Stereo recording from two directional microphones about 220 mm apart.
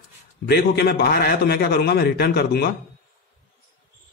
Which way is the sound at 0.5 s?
45° left (ahead or behind).